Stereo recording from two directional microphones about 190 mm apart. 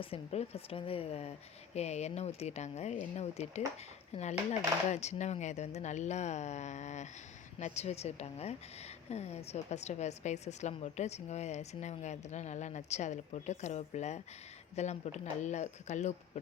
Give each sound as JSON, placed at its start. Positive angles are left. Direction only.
{"t": 0.0, "sound": "a woman's voice", "side_deg": 30}